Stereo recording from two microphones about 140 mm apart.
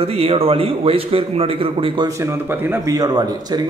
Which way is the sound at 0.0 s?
45° right (ahead or behind).